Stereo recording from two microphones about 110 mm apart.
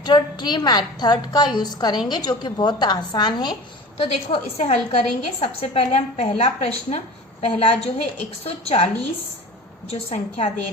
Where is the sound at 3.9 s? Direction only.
60° left (ahead or behind).